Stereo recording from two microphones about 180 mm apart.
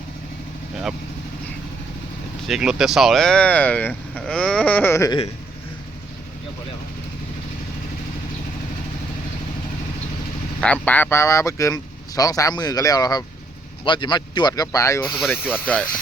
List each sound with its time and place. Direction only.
2.5 s speech: 5° right (ahead or behind); by 5.2 s 20° left (ahead or behind)
10.6 s speech: 10° left (ahead or behind)